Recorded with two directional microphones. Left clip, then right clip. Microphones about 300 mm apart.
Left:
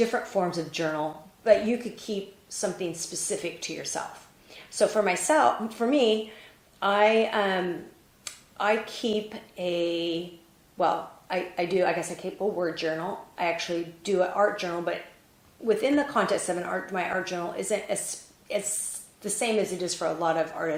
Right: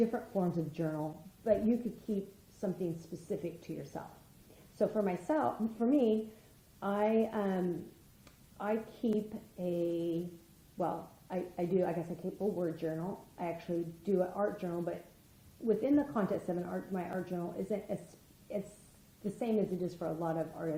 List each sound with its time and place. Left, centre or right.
0.0 s a woman's voice: centre
8.2 s a sound: centre
9.6 s a woman's voice: centre
12.2 s a woman's voice: left
19.4 s a woman's voice: centre